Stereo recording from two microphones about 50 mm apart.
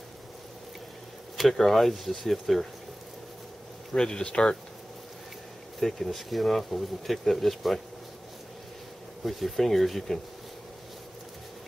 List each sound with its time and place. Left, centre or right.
1.5 s speech: centre
3.9 s speech: centre
5.8 s speech: centre
9.2 s speech: centre